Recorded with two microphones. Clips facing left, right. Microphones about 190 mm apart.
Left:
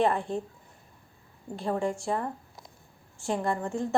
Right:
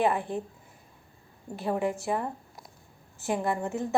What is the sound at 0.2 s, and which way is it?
Speech, 15° right (ahead or behind).